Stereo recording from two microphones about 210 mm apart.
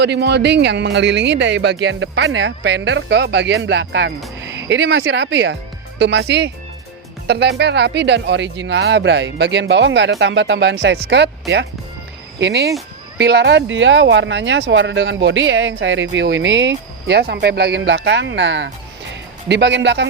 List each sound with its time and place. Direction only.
0.0 s speech: 55° right (ahead or behind)